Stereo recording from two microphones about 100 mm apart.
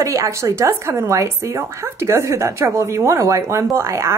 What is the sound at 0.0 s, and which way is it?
Speech, 30° right (ahead or behind).